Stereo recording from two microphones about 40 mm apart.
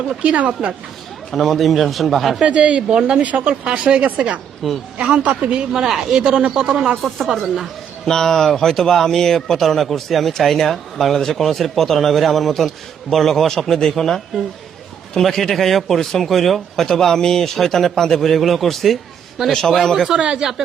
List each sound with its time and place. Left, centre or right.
0.2 s speech: right
1.3 s speech: centre
2.4 s speech: right
4.0 s speech: right
4.6 s speech: centre
4.9 s speech: right
7.0 s speech: centre
8.0 s speech: centre
20.1 s speech: right